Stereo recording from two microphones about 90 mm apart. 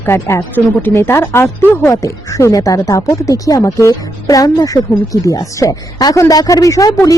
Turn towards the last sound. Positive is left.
turn(degrees=40)  # may be behind; listen again after turning